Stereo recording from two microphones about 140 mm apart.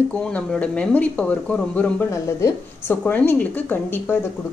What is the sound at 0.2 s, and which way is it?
Speech, 5° left (ahead or behind).